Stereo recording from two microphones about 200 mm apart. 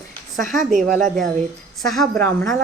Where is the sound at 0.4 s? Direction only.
40° right (ahead or behind).